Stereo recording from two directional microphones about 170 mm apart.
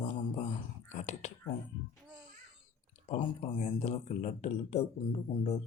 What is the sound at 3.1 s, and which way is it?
Speech, 35° left (ahead or behind).